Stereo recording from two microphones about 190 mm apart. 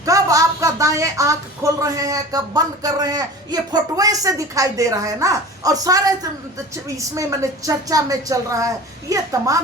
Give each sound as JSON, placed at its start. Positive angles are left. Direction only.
{"t": 0.0, "sound": "speech", "side_deg": -15}